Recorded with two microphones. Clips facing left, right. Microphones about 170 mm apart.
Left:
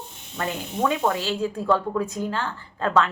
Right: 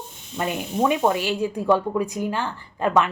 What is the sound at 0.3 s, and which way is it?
Speech, 15° right (ahead or behind).